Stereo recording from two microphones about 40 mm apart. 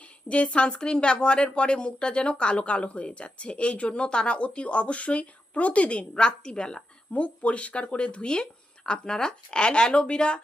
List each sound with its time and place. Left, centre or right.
0.3 s a woman's voice: left
7.1 s a woman's voice: left